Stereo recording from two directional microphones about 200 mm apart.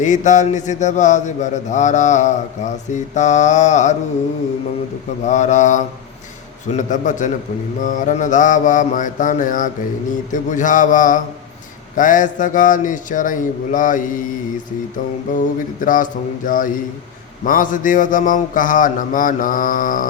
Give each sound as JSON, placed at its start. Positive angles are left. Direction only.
{"t": 0.0, "sound": "a man's voice", "side_deg": 40}
{"t": 5.2, "sound": "a man's voice", "side_deg": 35}
{"t": 15.3, "sound": "a man's voice", "side_deg": 40}
{"t": 16.5, "sound": "mantra", "side_deg": 45}